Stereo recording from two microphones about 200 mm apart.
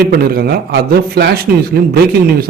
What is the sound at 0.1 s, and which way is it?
A man's voice, 50° right (ahead or behind).